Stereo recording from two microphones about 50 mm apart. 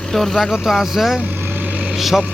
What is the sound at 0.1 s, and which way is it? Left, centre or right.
Speech, centre.